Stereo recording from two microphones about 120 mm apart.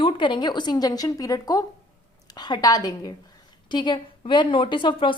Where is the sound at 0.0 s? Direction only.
40° left (ahead or behind).